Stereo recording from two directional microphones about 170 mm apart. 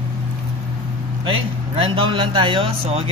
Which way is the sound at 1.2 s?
30° right (ahead or behind).